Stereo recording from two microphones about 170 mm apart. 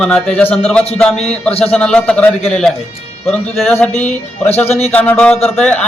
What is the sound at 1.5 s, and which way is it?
Speech, 35° left (ahead or behind).